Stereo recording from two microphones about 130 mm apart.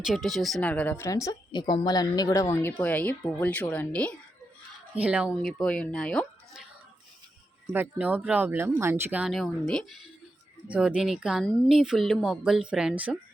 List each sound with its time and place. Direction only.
0.0 s a woman's voice: centre (ahead or behind)
0.6 s a woman's voice: 10° left (ahead or behind)
4.9 s speech: 10° right (ahead or behind)
5.4 s speech: 5° left (ahead or behind)
7.7 s speech: 15° right (ahead or behind)
9.2 s a woman's voice: centre (ahead or behind)
11.4 s speech: 10° left (ahead or behind)
11.7 s a woman's voice: 5° right (ahead or behind)